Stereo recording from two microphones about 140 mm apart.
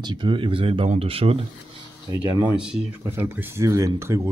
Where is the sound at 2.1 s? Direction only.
30° right (ahead or behind).